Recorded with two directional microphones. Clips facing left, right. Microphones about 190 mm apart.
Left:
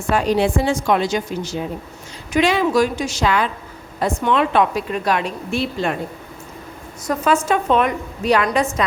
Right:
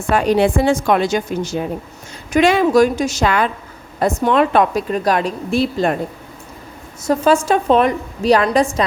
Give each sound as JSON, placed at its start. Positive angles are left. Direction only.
{"t": 0.1, "sound": "a woman's voice", "side_deg": -60}
{"t": 7.1, "sound": "a woman's voice", "side_deg": -30}